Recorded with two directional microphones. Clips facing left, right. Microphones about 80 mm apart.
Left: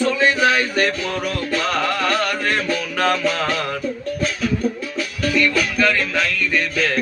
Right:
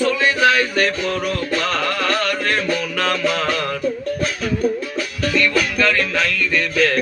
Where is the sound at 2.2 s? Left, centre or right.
Centre.